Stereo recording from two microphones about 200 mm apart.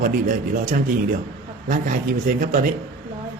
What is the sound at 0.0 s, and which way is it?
A man's voice, 45° right (ahead or behind).